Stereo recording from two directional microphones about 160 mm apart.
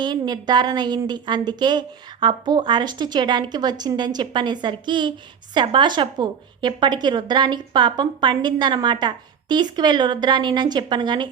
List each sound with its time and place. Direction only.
0.0 s a woman's voice: 25° right (ahead or behind)